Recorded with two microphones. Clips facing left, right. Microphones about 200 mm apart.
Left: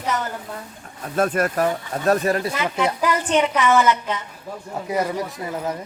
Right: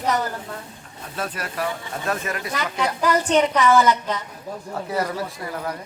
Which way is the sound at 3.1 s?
35° right (ahead or behind).